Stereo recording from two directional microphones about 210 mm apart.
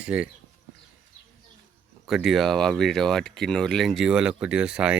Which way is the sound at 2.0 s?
Centre (ahead or behind).